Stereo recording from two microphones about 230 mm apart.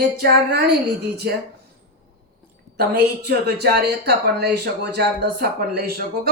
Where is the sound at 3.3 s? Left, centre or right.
Right.